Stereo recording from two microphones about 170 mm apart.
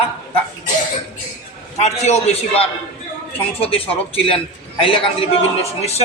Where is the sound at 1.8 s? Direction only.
40° left (ahead or behind).